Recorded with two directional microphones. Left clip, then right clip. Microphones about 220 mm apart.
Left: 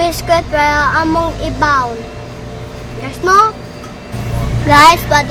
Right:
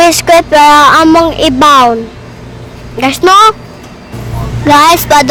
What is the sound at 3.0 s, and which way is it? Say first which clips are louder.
Speech: right 8 dB; 45° right (ahead or behind).